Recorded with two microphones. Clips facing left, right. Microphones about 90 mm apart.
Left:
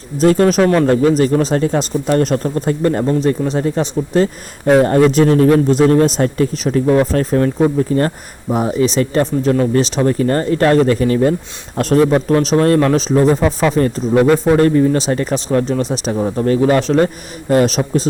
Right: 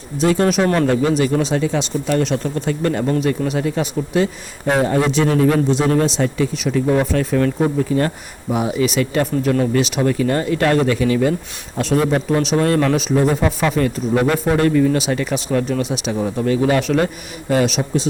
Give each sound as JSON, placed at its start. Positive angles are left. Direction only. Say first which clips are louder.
{"t": 0.2, "sound": "speech", "louder": "left 4 dB", "side_deg": 40}
{"t": 3.2, "sound": "speech", "louder": "left 3 dB", "side_deg": 35}
{"t": 4.8, "sound": "speech", "louder": "left 4 dB", "side_deg": 50}
{"t": 17.5, "sound": "speech", "louder": "left 4 dB", "side_deg": 45}